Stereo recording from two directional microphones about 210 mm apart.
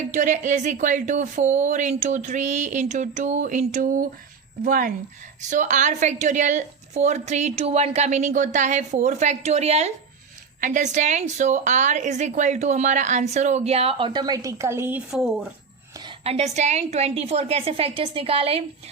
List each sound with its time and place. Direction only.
0.1 s a woman's voice: 35° right (ahead or behind); by 15.3 s 10° right (ahead or behind)
16.0 s a woman's voice: 30° right (ahead or behind)